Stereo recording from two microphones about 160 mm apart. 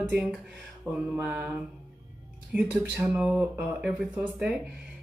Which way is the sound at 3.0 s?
10° right (ahead or behind).